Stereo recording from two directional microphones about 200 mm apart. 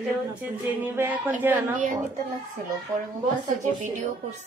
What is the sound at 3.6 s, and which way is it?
Speech, 35° right (ahead or behind).